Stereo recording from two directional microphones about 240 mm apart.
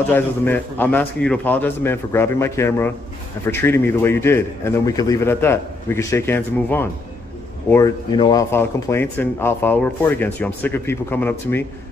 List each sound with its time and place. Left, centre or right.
0.1 s speech: centre